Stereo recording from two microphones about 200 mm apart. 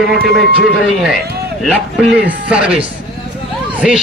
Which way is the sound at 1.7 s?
5° right (ahead or behind).